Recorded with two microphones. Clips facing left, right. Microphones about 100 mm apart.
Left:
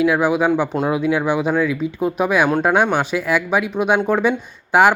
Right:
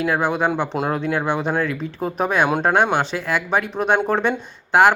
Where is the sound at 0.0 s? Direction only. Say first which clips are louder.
Left 4 dB; 5° left (ahead or behind).